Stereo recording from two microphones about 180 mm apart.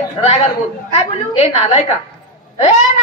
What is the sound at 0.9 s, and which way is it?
Speech, 35° left (ahead or behind).